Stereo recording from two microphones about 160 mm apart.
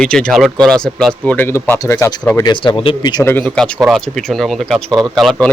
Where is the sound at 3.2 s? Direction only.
10° left (ahead or behind).